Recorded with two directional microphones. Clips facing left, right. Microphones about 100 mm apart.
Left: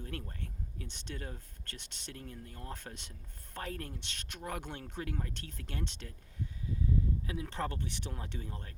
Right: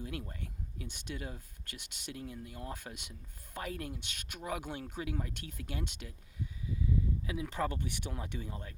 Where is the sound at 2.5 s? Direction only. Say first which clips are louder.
Right 2 dB; 15° right (ahead or behind).